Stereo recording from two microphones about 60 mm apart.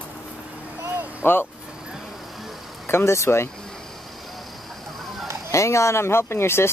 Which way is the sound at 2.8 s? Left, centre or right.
Left.